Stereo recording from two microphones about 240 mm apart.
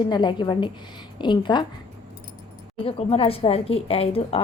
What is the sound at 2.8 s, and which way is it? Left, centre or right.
A woman's voice, left.